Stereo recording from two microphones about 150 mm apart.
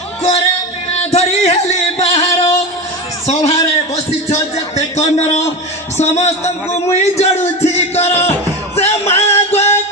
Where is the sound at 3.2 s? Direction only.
45° left (ahead or behind).